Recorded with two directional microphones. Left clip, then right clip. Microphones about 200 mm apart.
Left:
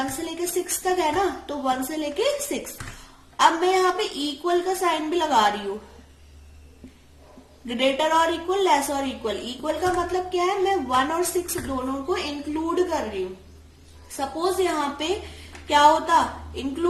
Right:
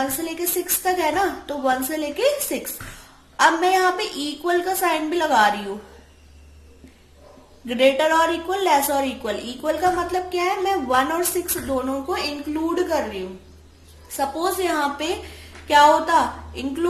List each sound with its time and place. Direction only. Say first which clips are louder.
0.2 s a woman's voice: right 1 dB; 30° right (ahead or behind)
7.7 s a woman's voice: right 4 dB; 25° right (ahead or behind)
14.2 s a woman's voice: right 1 dB; 30° right (ahead or behind)